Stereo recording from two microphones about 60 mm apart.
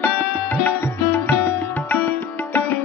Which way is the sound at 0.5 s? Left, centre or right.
Left.